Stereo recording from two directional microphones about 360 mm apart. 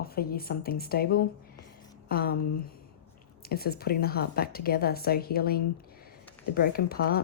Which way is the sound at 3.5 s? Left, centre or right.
Left.